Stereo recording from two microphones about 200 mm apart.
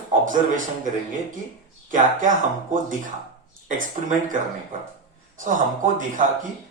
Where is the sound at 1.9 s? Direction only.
40° right (ahead or behind).